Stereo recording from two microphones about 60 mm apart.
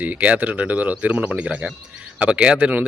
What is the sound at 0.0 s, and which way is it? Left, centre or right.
A man's voice, right.